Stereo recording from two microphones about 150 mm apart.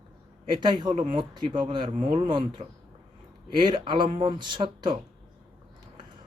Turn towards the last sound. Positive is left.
turn(degrees=-30)  # may be behind; listen again after turning